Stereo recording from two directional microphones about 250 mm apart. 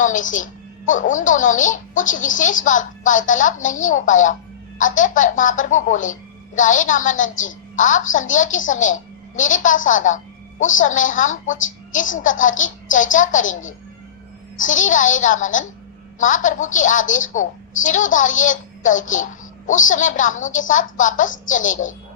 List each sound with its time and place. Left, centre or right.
0.0 s a woman's voice: left
14.6 s a woman's voice: left